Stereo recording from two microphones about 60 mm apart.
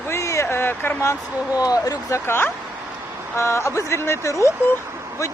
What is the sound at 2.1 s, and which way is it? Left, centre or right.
Speech, left.